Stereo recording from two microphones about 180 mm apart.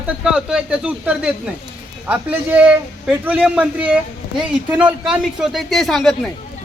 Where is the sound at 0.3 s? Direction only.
5° right (ahead or behind).